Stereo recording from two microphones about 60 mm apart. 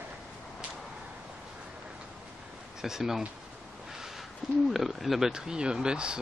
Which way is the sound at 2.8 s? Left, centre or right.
Centre.